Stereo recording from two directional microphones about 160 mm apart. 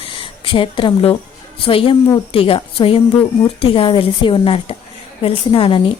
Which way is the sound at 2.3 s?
35° left (ahead or behind).